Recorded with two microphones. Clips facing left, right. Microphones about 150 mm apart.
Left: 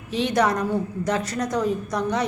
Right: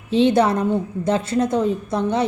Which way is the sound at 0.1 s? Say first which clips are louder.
Right 6 dB; 25° right (ahead or behind).